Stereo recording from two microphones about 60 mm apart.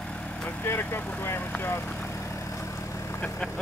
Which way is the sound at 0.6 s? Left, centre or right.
Left.